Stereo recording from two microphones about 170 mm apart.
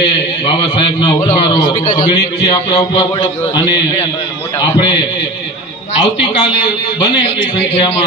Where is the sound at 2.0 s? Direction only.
25° left (ahead or behind).